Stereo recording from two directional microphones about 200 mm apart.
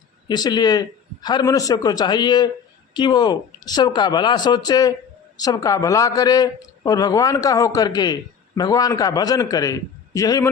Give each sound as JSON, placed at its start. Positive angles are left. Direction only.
{"t": 0.3, "sound": "a man's voice", "side_deg": 20}